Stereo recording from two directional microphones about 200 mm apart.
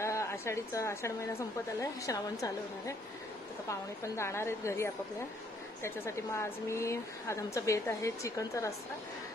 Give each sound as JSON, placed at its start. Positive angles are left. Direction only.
{"t": 0.0, "sound": "a sound", "side_deg": 15}
{"t": 1.8, "sound": "speech", "side_deg": 15}
{"t": 3.6, "sound": "speech", "side_deg": 15}